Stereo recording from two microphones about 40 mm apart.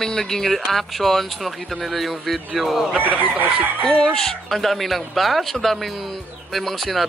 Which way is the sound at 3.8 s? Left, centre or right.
Centre.